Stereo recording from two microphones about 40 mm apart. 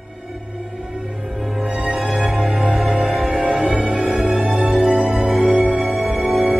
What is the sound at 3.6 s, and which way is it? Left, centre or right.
Music, right.